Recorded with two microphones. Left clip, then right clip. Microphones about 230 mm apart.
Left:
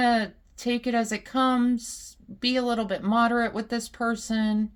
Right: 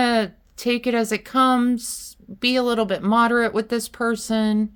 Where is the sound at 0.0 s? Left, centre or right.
Right.